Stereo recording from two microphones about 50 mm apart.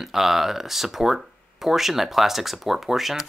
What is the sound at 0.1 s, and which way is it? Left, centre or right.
Speech, centre.